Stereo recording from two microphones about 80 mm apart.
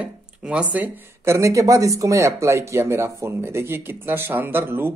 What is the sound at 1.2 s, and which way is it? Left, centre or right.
A man's voice, right.